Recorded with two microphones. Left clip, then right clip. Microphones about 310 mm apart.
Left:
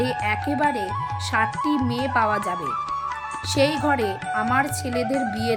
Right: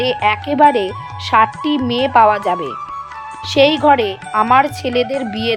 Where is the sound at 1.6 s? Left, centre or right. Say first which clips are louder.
Right 7 dB; centre.